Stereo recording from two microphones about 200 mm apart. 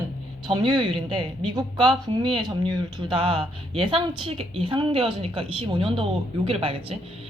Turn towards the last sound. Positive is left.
turn(degrees=-30)  # may be behind; listen again after turning